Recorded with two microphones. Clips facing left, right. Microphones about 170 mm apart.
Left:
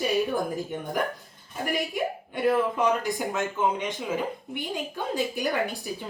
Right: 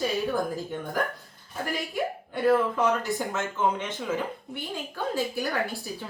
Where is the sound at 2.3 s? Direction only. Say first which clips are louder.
Right 2 dB; 15° left (ahead or behind).